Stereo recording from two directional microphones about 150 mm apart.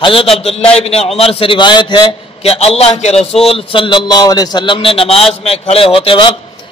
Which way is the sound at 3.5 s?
40° left (ahead or behind).